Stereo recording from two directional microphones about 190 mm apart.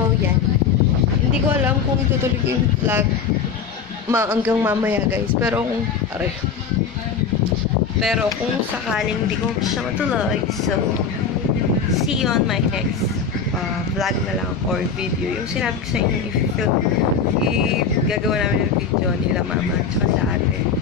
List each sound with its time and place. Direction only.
4.1 s speech: 10° right (ahead or behind)
8.0 s speech: centre (ahead or behind)
12.0 s speech: centre (ahead or behind)
18.0 s speech: centre (ahead or behind)